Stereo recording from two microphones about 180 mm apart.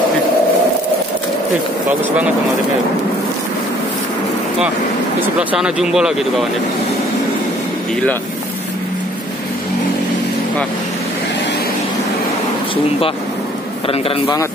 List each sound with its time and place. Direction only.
5.4 s speech: 5° right (ahead or behind)
13.8 s speech: 30° left (ahead or behind)